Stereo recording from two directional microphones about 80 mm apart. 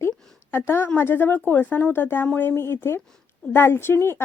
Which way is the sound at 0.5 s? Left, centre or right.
Left.